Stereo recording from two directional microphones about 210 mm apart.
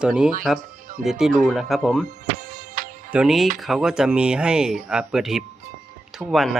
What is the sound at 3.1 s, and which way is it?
Speech, 5° right (ahead or behind).